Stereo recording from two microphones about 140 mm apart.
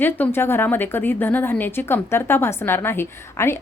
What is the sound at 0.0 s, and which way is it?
A woman's voice, 15° left (ahead or behind).